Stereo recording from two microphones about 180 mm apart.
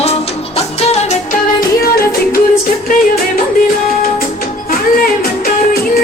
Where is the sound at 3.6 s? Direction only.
55° left (ahead or behind).